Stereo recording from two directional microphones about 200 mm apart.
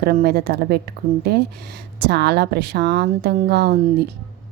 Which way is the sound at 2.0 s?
55° right (ahead or behind).